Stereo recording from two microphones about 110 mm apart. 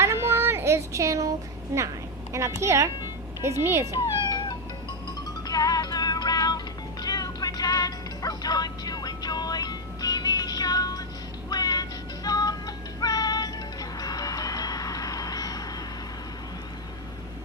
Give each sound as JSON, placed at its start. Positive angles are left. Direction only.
{"t": 0.0, "sound": "female singing", "side_deg": -25}
{"t": 1.7, "sound": "a child's voice", "side_deg": -25}
{"t": 4.2, "sound": "cat", "side_deg": 45}
{"t": 5.5, "sound": "music", "side_deg": 35}